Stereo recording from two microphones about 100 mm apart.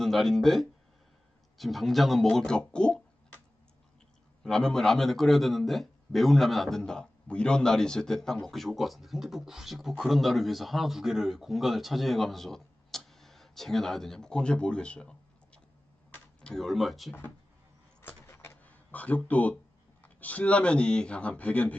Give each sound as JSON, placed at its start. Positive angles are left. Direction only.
{"t": 0.0, "sound": "a man's voice", "side_deg": 0}
{"t": 4.4, "sound": "a man's voice", "side_deg": 5}
{"t": 16.4, "sound": "a man's voice", "side_deg": 5}
{"t": 18.0, "sound": "a sound", "side_deg": 25}
{"t": 20.0, "sound": "speech", "side_deg": 15}